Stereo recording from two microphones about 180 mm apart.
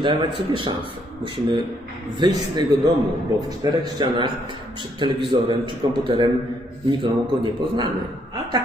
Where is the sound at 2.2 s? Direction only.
25° right (ahead or behind).